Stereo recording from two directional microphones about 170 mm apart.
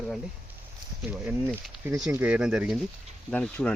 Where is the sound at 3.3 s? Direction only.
10° left (ahead or behind).